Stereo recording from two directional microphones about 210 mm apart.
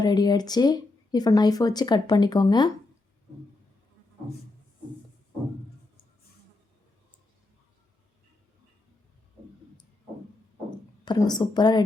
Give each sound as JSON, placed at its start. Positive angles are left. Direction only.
{"t": 0.0, "sound": "speech", "side_deg": 20}
{"t": 11.0, "sound": "speech", "side_deg": 20}